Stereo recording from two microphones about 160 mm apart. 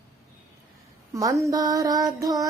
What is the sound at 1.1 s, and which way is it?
Child singing, 20° right (ahead or behind).